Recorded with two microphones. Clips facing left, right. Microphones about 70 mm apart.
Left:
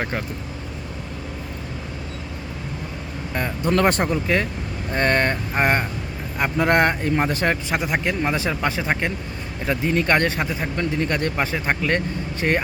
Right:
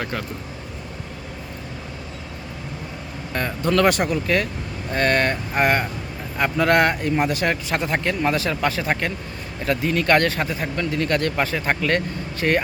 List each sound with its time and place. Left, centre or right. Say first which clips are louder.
0.0 s speech: left 1 dB; left
3.3 s speech: even; centre
3.7 s speech: right 1 dB; left
7.5 s speech: even; centre